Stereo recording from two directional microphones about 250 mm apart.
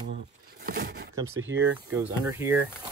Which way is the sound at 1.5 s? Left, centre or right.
Centre.